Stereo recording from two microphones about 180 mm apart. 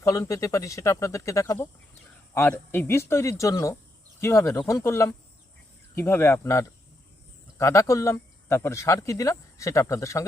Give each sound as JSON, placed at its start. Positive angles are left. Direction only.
{"t": 0.0, "sound": "speech", "side_deg": 15}